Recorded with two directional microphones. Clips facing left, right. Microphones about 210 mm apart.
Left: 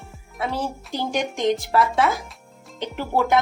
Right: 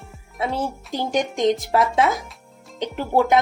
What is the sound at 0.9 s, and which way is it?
Speech, 20° right (ahead or behind).